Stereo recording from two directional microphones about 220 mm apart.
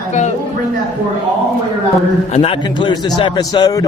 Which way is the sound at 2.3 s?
25° left (ahead or behind).